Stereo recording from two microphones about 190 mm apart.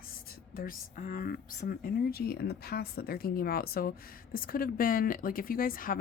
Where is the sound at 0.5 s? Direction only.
50° left (ahead or behind).